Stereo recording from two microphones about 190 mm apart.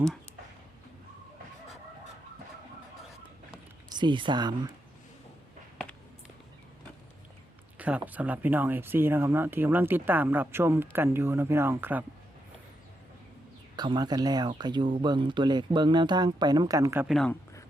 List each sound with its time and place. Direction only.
3.8 s speech: 25° right (ahead or behind)
7.8 s speech: 5° right (ahead or behind)
13.7 s speech: 20° right (ahead or behind)
17.1 s speech: centre (ahead or behind)